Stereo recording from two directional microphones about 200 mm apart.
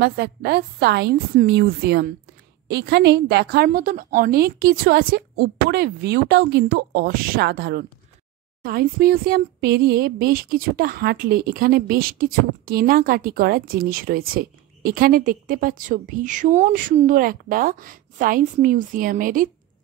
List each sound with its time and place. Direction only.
0.0 s speech: 50° right (ahead or behind)